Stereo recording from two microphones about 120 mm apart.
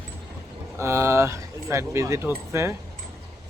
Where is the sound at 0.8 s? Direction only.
25° right (ahead or behind).